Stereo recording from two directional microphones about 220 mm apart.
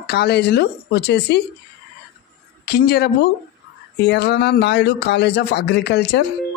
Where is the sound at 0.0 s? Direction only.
45° left (ahead or behind).